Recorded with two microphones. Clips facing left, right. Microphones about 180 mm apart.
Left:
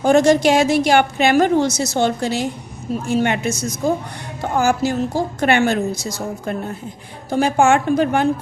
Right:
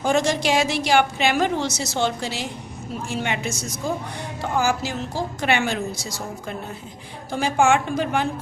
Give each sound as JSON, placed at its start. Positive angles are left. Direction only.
{"t": 0.0, "sound": "a woman's voice", "side_deg": 55}
{"t": 7.3, "sound": "a woman's voice", "side_deg": 50}